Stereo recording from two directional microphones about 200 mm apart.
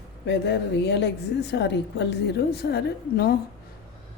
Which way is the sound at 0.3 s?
60° left (ahead or behind).